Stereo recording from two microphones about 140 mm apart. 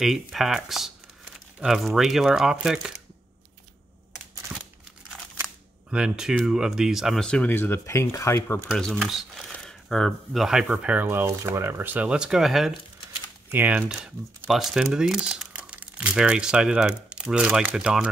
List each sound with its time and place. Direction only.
0.0 s speech: centre (ahead or behind)
5.4 s speech: 5° right (ahead or behind); by 8.5 s 20° left (ahead or behind)
8.6 s speech: 5° left (ahead or behind)
13.5 s speech: 15° right (ahead or behind)
14.2 s speech: 25° right (ahead or behind)
14.5 s speech: centre (ahead or behind)